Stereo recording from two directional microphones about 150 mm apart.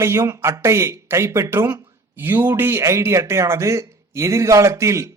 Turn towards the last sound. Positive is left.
turn(degrees=-20)  # may be behind; listen again after turning